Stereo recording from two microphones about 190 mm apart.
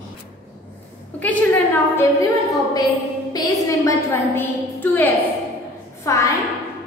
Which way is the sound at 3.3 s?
20° left (ahead or behind).